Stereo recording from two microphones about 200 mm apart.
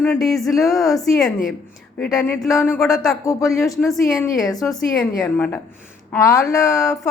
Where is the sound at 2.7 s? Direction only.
Centre (ahead or behind).